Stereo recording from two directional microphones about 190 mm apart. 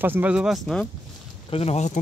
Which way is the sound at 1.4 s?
30° left (ahead or behind).